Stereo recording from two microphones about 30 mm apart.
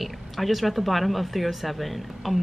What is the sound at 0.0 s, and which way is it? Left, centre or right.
Speech, centre.